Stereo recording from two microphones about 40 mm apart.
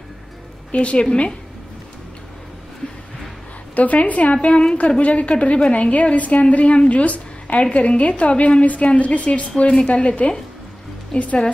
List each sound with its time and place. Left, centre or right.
0.7 s a woman's voice: left
3.7 s a woman's voice: left